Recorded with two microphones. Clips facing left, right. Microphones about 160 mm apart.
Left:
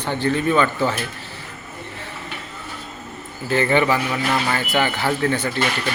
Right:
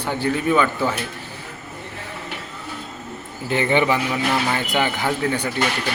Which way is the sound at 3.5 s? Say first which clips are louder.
Left 1 dB; 20° right (ahead or behind).